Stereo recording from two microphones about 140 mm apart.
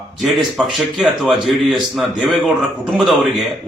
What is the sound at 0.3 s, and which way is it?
A man's voice, centre (ahead or behind).